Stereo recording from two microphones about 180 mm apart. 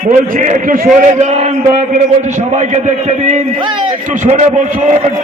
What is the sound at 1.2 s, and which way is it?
A man's voice, 40° right (ahead or behind).